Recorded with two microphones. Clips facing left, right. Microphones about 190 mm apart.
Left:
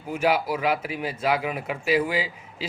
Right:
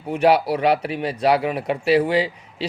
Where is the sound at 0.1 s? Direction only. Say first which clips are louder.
Right 6 dB; 35° right (ahead or behind).